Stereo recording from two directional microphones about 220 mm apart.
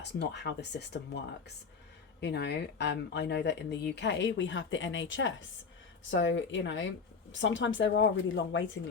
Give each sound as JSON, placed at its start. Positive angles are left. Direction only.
{"t": 0.0, "sound": "speech", "side_deg": 50}
{"t": 2.2, "sound": "speech", "side_deg": 50}